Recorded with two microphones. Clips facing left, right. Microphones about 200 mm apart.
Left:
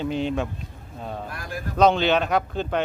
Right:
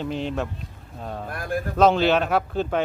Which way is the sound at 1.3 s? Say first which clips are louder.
Right 6 dB; 55° right (ahead or behind).